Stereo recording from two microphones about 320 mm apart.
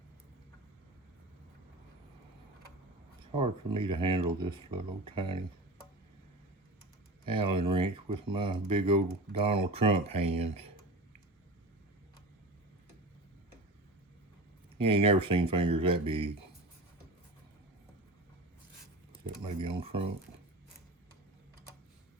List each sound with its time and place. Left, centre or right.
3.3 s speech: centre
7.3 s speech: centre
14.8 s speech: centre
19.4 s speech: centre